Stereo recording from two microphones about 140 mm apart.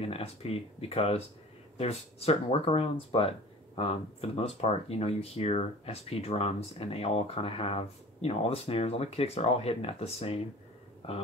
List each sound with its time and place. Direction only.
0.0 s speech: 45° left (ahead or behind)